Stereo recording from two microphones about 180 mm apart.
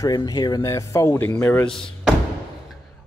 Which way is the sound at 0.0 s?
20° left (ahead or behind).